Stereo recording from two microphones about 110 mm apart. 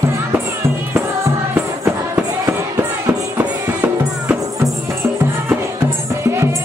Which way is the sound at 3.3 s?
20° right (ahead or behind).